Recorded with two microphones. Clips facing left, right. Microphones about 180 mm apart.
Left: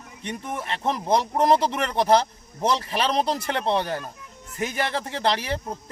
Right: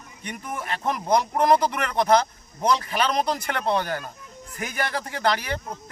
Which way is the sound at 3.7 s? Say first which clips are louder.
Left 1 dB; centre (ahead or behind).